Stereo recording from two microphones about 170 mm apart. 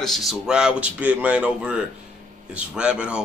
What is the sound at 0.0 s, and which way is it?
A man's voice, centre (ahead or behind).